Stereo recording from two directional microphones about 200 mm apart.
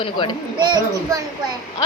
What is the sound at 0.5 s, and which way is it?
Speech, 20° right (ahead or behind).